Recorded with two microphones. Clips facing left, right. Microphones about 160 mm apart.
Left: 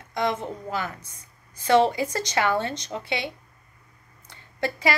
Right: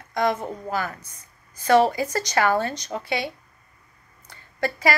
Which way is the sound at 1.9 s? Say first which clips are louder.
Right 1 dB; 25° left (ahead or behind).